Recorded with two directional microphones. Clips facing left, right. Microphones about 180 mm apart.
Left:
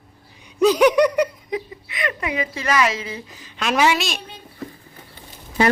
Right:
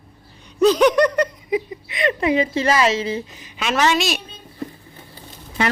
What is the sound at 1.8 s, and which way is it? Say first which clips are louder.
Speech: right 7 dB; 25° right (ahead or behind).